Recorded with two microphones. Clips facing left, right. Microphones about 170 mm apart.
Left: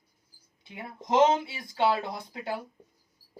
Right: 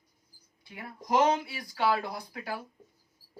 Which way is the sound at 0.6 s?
25° left (ahead or behind).